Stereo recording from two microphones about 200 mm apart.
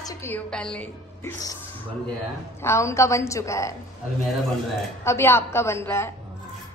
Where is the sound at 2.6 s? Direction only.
15° left (ahead or behind).